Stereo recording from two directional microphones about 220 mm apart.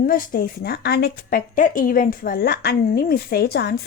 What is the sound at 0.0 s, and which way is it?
Speech, 40° left (ahead or behind).